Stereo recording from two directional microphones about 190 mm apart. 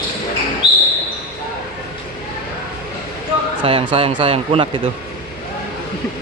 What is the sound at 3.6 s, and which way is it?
A man's voice, 30° right (ahead or behind).